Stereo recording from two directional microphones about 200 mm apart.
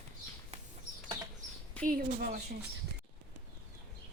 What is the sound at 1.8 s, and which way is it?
Speech, 45° right (ahead or behind).